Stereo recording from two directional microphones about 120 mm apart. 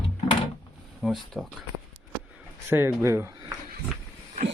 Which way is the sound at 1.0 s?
Centre (ahead or behind).